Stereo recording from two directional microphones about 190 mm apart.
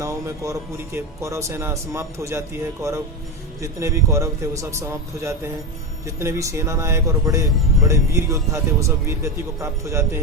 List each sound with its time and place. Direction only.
0.0 s music: 15° right (ahead or behind)
0.9 s speech: 15° right (ahead or behind)
3.6 s speech: 15° right (ahead or behind)